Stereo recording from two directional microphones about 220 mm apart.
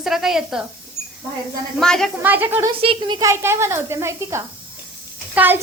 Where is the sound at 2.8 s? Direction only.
25° right (ahead or behind).